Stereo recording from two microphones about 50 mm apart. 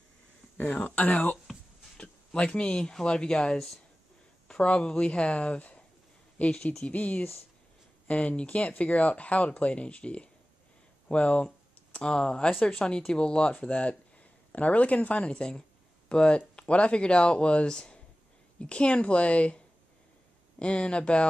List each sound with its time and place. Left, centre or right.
0.7 s speech: left
2.3 s speech: left